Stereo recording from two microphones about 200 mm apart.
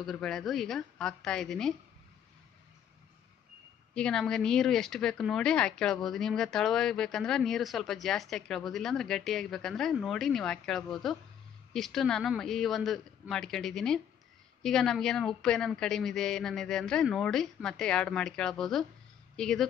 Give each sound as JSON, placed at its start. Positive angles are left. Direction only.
{"t": 0.0, "sound": "speech", "side_deg": 0}
{"t": 3.9, "sound": "speech", "side_deg": 5}